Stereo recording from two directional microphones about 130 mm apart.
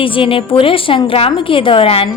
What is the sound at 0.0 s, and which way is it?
A woman's voice, 40° left (ahead or behind).